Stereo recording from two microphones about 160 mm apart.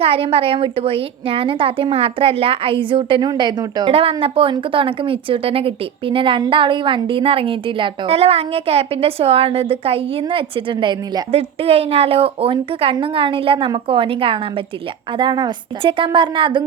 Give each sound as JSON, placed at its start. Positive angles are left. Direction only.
{"t": 0.0, "sound": "a woman's voice", "side_deg": -35}